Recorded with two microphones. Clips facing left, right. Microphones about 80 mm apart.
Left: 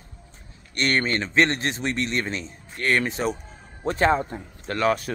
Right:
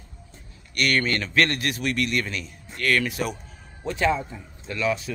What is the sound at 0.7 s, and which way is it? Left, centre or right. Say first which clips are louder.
A man's voice: even; left.